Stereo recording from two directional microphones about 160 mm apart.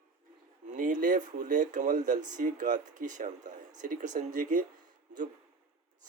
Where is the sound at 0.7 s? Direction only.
55° right (ahead or behind).